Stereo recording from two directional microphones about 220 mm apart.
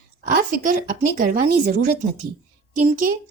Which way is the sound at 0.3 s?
40° right (ahead or behind).